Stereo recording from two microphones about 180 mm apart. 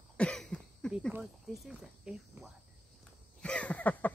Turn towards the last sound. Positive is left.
turn(degrees=10)  # may be behind; listen again after turning